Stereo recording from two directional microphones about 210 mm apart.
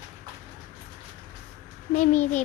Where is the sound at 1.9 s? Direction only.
35° left (ahead or behind).